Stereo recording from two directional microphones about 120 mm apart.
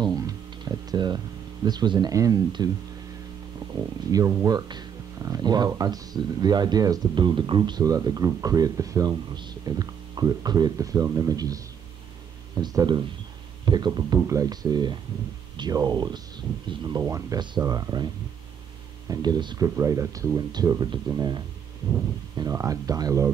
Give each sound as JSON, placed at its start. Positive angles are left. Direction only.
{"t": 0.0, "sound": "a sound", "side_deg": -30}
{"t": 4.1, "sound": "speech", "side_deg": -30}
{"t": 17.0, "sound": "speech", "side_deg": -25}
{"t": 22.4, "sound": "speech", "side_deg": -30}